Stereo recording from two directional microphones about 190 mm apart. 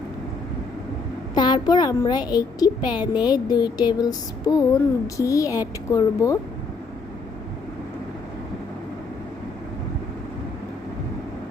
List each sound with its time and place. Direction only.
1.4 s a woman's voice: 25° left (ahead or behind)